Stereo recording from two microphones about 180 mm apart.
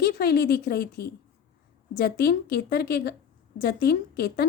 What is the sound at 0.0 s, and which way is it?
A woman's voice, 60° left (ahead or behind).